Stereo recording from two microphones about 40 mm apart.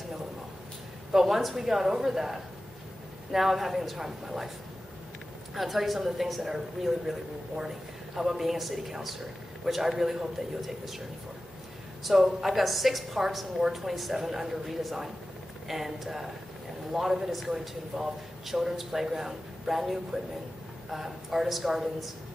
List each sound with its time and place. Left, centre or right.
1.1 s speech: centre
5.5 s a woman's voice: centre
12.0 s a woman's voice: centre